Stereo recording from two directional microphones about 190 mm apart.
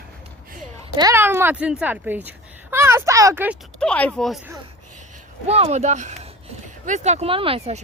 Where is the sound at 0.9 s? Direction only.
15° right (ahead or behind).